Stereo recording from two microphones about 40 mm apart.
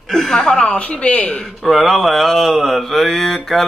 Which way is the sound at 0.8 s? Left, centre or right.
Left.